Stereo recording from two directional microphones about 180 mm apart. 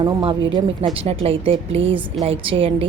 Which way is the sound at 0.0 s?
25° right (ahead or behind).